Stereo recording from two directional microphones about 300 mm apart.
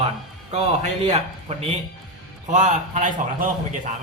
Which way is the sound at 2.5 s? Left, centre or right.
Right.